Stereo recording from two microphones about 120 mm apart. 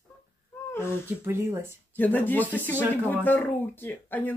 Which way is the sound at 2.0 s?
15° left (ahead or behind).